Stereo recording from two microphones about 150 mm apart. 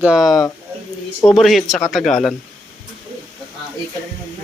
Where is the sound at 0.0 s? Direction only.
5° right (ahead or behind).